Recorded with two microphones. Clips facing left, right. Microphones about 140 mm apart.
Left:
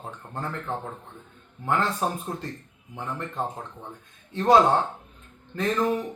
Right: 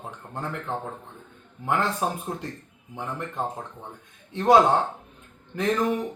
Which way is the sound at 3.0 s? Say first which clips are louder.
Even; 15° right (ahead or behind).